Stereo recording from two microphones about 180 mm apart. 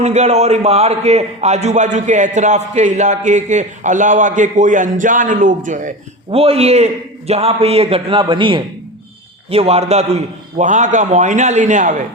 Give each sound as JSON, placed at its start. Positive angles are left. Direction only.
{"t": 0.0, "sound": "a man's voice", "side_deg": -40}
{"t": 6.3, "sound": "a man's voice", "side_deg": -35}